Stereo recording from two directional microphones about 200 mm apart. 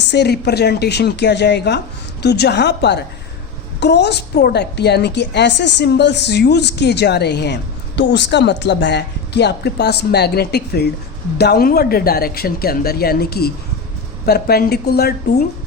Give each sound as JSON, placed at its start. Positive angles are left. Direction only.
{"t": 0.1, "sound": "a woman's voice", "side_deg": 55}